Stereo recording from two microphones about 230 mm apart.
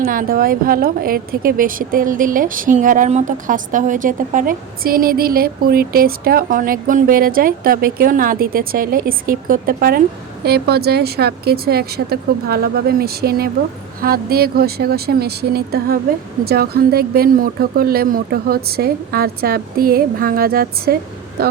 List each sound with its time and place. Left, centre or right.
0.0 s a woman's voice: right